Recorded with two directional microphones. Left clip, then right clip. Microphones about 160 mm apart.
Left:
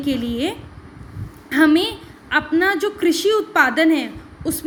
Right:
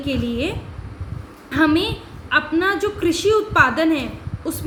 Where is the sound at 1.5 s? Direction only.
40° left (ahead or behind).